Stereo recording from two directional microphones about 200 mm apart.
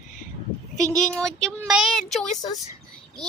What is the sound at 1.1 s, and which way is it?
A child's voice, centre (ahead or behind).